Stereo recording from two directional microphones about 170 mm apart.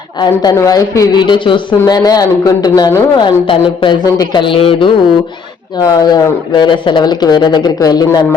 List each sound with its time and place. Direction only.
0.2 s speech: 20° left (ahead or behind)